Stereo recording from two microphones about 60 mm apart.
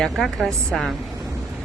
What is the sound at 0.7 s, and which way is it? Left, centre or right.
Speech, centre.